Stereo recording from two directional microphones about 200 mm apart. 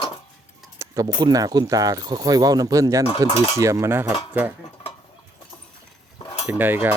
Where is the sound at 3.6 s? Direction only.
15° right (ahead or behind).